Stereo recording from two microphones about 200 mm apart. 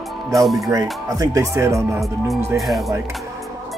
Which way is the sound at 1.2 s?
15° right (ahead or behind).